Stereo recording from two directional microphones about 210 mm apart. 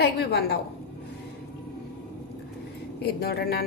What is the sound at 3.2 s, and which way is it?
Speech, 45° left (ahead or behind).